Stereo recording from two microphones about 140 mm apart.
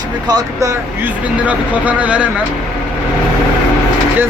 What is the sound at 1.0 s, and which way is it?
Speech, 10° right (ahead or behind).